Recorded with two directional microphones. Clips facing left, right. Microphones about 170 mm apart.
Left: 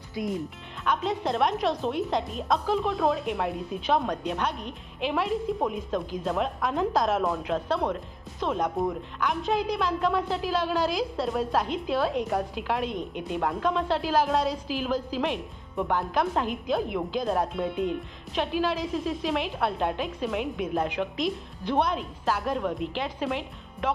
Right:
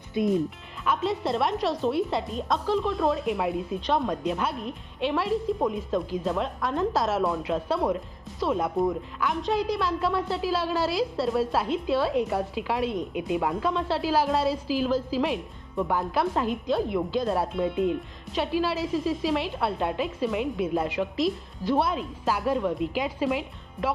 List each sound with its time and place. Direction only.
0.1 s speech: 25° right (ahead or behind)
0.9 s a woman's voice: centre (ahead or behind)